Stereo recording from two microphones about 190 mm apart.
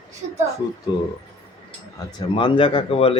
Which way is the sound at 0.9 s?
20° left (ahead or behind).